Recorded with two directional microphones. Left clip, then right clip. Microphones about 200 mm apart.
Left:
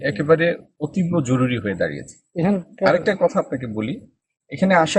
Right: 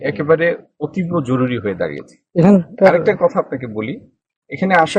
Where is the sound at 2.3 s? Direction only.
50° right (ahead or behind).